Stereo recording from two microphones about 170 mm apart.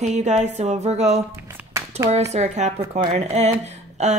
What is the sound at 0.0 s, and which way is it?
Speech, 40° right (ahead or behind).